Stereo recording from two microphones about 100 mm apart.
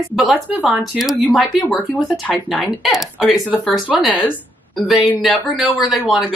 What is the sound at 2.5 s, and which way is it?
Speech, centre (ahead or behind).